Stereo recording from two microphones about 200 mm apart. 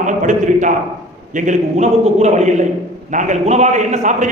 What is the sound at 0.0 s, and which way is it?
A man's voice, 40° right (ahead or behind).